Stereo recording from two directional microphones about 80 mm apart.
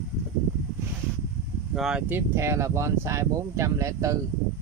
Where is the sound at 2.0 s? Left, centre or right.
Right.